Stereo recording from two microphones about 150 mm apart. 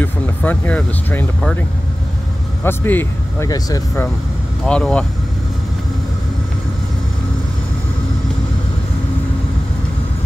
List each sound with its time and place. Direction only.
0.0 s speech: 10° left (ahead or behind)
2.6 s speech: 15° left (ahead or behind)
4.6 s speech: 5° left (ahead or behind)